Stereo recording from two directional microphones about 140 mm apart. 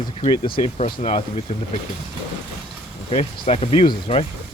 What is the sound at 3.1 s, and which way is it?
Speech, 45° left (ahead or behind).